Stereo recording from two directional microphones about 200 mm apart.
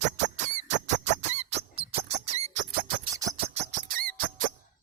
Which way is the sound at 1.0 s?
35° right (ahead or behind).